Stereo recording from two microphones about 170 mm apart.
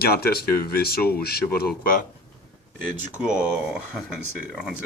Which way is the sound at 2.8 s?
55° right (ahead or behind).